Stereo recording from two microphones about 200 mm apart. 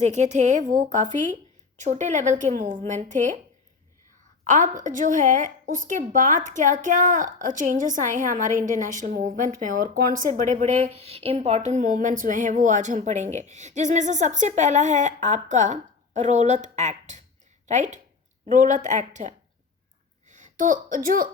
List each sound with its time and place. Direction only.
0.0 s a woman's voice: 35° right (ahead or behind)
4.4 s a woman's voice: 40° right (ahead or behind)